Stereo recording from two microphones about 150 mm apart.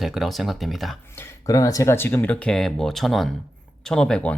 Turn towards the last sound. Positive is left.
turn(degrees=5)  # may be behind; listen again after turning